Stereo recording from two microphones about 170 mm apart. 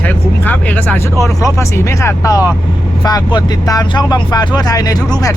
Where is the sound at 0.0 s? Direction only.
10° left (ahead or behind).